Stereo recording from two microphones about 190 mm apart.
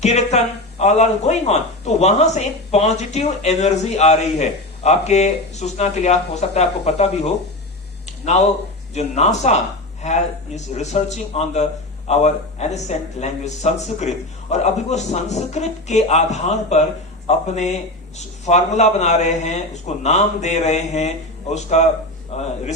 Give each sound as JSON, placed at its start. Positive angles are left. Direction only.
{"t": 0.0, "sound": "speech", "side_deg": 35}
{"t": 8.0, "sound": "a sound", "side_deg": 35}
{"t": 9.0, "sound": "speech", "side_deg": 35}